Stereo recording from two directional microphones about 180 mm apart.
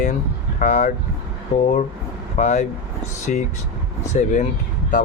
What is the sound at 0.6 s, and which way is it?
Speech, 45° left (ahead or behind).